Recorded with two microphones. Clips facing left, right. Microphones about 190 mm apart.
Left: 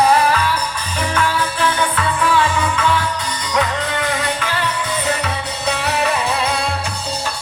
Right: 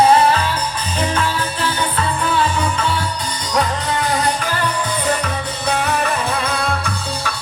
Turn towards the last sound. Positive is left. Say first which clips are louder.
# even
turn(degrees=-55)  # may be behind; listen again after turning